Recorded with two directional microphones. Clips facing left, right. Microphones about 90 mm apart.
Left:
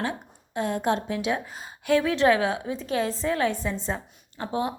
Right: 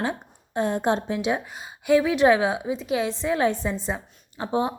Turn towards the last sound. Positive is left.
turn(degrees=-25)  # may be behind; listen again after turning